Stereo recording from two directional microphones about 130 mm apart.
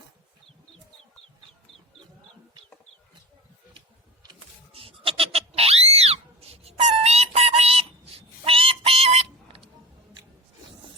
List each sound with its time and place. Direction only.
4.7 s pig: 45° right (ahead or behind)